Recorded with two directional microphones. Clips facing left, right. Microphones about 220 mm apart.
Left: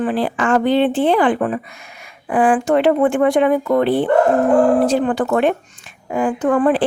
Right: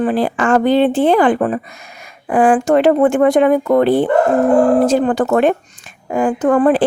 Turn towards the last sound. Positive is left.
turn(degrees=-40)  # may be behind; listen again after turning